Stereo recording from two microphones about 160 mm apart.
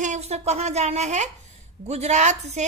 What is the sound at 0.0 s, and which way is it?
A woman's voice, 45° right (ahead or behind).